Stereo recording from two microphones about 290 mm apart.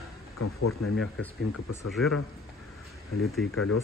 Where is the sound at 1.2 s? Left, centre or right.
Centre.